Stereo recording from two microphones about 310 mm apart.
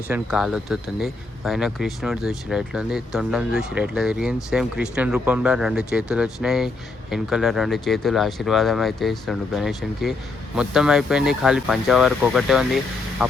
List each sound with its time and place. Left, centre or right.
0.1 s speech: centre